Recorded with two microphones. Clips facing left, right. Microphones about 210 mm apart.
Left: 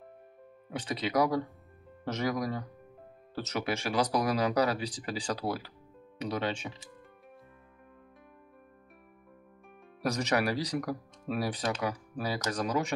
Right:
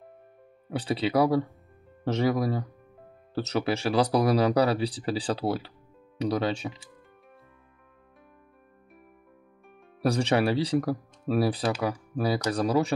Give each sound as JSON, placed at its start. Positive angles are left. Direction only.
{"t": 0.7, "sound": "speech", "side_deg": -30}
{"t": 10.0, "sound": "speech", "side_deg": -30}